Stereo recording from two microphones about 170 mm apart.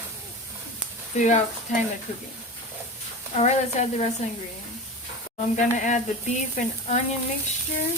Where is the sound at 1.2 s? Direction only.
45° left (ahead or behind).